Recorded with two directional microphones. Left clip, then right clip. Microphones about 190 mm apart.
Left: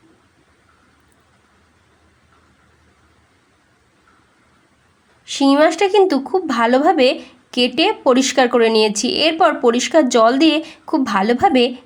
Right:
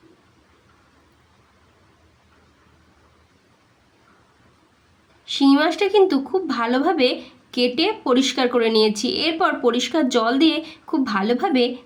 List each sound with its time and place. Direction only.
5.2 s speech: 35° left (ahead or behind)